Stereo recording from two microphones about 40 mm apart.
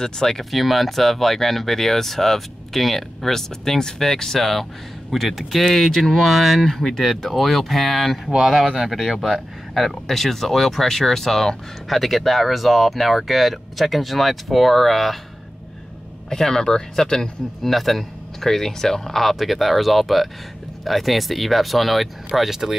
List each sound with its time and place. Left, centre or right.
0.0 s speech: centre
0.4 s speech: centre
8.3 s speech: centre
8.9 s speech: centre
16.3 s speech: centre
17.6 s speech: centre